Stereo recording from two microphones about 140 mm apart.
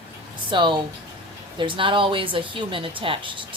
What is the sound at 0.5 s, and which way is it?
Speech, 35° right (ahead or behind).